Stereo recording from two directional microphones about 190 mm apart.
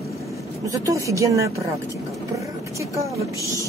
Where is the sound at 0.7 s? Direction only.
15° right (ahead or behind).